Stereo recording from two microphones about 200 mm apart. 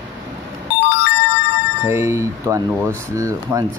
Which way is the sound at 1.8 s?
15° right (ahead or behind).